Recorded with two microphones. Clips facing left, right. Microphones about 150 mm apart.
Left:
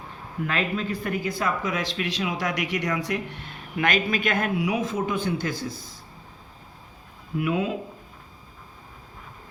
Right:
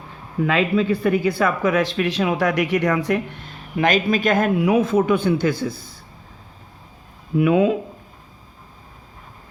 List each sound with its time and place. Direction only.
0.4 s speech: 85° right; by 3.0 s 55° right (ahead or behind)
3.5 s speech: 35° right (ahead or behind); by 5.5 s 70° right (ahead or behind)
7.4 s speech: 90° right